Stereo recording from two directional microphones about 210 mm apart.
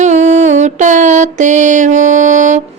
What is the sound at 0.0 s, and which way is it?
Mantra, 35° right (ahead or behind).